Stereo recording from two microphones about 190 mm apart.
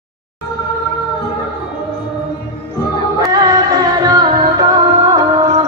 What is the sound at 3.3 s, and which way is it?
Music, 20° right (ahead or behind).